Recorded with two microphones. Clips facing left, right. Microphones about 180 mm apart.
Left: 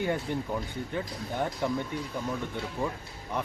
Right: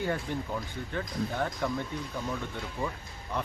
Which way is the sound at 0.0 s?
15° left (ahead or behind).